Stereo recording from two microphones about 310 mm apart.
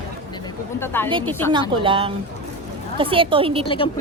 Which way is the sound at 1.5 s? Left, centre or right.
Centre.